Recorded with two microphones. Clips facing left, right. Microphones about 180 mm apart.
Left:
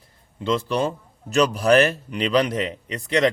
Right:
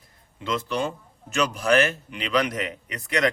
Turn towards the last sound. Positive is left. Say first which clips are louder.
# left 4 dB
turn(degrees=30)  # may be behind; listen again after turning